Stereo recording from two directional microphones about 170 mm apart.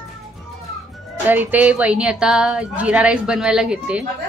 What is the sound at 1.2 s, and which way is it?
A woman's voice, 10° right (ahead or behind).